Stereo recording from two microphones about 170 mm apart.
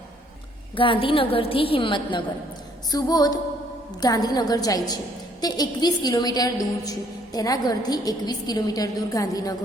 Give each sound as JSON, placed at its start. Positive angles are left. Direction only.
{"t": 0.8, "sound": "a woman's voice", "side_deg": 30}